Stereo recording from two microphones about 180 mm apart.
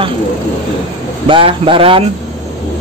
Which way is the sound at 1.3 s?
30° right (ahead or behind).